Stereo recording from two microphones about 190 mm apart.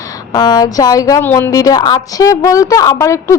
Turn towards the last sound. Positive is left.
turn(degrees=15)  # may be behind; listen again after turning